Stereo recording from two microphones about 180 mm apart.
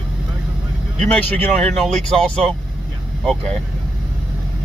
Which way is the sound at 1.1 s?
5° left (ahead or behind).